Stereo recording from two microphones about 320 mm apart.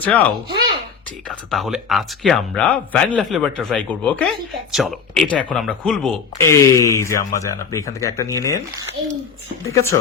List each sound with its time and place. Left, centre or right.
0.0 s speech: centre
9.7 s speech: centre